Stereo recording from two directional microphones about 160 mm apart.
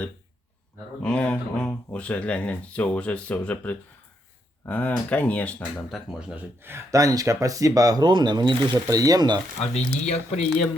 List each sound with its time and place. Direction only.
1.0 s speech: 5° left (ahead or behind)
6.1 s speech: 5° right (ahead or behind); by 9.4 s 25° right (ahead or behind)
9.7 s speech: 45° left (ahead or behind)